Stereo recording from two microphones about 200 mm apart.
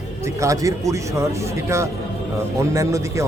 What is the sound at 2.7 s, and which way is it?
Speech, 15° right (ahead or behind).